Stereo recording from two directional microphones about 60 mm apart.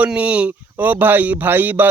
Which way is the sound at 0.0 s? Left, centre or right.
Right.